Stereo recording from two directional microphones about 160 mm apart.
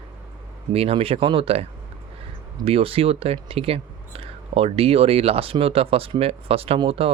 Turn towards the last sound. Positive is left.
turn(degrees=-35)  # may be behind; listen again after turning